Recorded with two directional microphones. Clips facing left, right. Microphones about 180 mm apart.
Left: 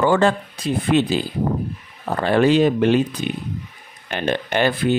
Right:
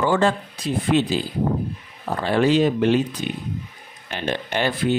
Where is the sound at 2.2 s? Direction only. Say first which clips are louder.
Left 3 dB; 60° left (ahead or behind).